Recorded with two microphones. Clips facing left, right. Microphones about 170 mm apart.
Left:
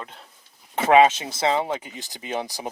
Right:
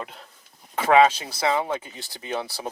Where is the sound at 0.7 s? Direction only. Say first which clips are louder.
Left 1 dB; 20° left (ahead or behind).